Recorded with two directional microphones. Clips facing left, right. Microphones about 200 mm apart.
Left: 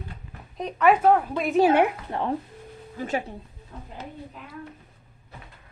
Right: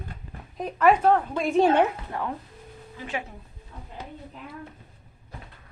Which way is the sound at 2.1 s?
25° left (ahead or behind).